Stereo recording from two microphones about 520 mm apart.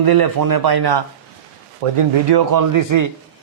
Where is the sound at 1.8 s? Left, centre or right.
Right.